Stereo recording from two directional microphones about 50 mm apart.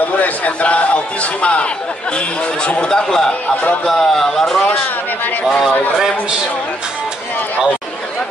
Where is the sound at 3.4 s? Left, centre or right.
Left.